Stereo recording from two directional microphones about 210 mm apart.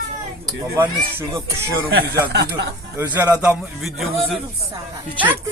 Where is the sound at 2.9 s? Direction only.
10° right (ahead or behind).